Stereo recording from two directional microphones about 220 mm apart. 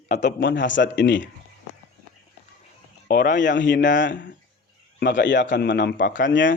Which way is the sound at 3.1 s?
40° left (ahead or behind).